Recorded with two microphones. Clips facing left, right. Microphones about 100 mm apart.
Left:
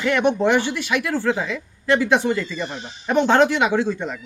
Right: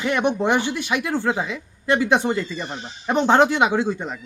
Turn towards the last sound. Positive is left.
turn(degrees=-15)  # may be behind; listen again after turning